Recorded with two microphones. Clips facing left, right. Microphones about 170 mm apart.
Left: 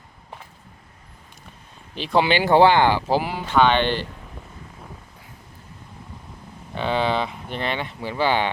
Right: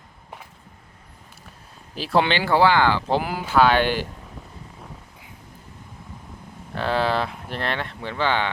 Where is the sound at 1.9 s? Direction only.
5° right (ahead or behind).